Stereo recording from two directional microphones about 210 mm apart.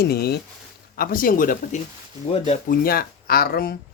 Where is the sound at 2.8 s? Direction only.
45° left (ahead or behind).